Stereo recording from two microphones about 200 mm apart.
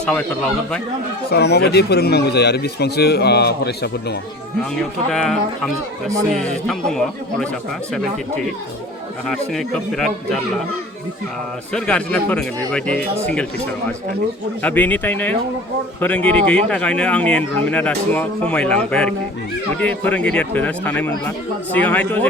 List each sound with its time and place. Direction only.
1.3 s speech: 55° left (ahead or behind)
4.7 s speech: centre (ahead or behind)
6.4 s speech: 5° left (ahead or behind)
9.3 s speech: centre (ahead or behind)
11.7 s speech: 5° left (ahead or behind)
14.6 s a man's voice: 10° left (ahead or behind)